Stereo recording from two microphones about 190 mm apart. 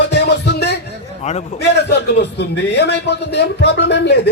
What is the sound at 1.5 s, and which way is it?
A man's voice, 60° left (ahead or behind).